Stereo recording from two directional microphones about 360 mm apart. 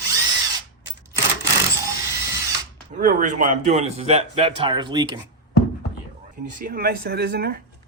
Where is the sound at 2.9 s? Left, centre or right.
Right.